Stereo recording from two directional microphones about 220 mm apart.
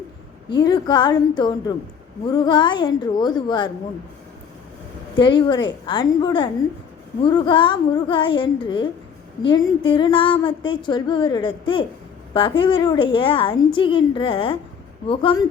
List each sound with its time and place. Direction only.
0.5 s a woman's voice: 20° left (ahead or behind)
5.1 s a woman's voice: 20° left (ahead or behind)